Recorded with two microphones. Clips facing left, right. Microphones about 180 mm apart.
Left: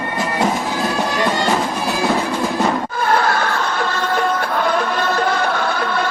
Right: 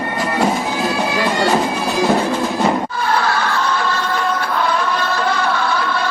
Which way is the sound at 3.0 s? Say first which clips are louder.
Left 1 dB; 50° left (ahead or behind).